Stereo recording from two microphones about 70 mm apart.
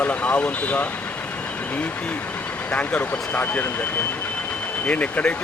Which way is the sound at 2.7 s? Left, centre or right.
Centre.